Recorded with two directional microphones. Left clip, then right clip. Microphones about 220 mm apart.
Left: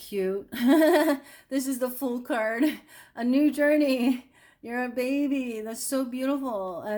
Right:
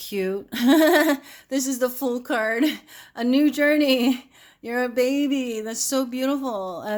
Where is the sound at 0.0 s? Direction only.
25° right (ahead or behind).